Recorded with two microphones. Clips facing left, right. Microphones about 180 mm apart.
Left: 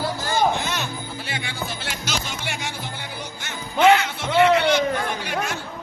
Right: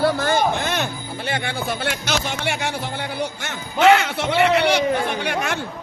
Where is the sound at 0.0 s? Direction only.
60° right (ahead or behind); by 5.5 s 80° right.